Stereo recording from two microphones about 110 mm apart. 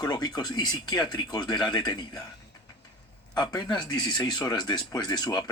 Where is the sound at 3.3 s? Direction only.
40° left (ahead or behind).